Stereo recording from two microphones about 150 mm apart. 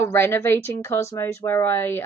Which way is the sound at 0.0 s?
15° left (ahead or behind).